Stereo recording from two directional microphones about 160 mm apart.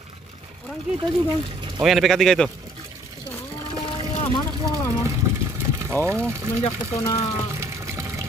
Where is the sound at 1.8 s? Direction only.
Centre (ahead or behind).